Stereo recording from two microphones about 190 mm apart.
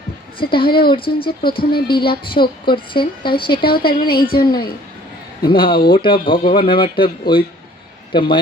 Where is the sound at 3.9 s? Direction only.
50° left (ahead or behind).